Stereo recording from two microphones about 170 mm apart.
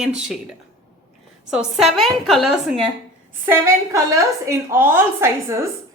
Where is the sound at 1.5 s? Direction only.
5° right (ahead or behind).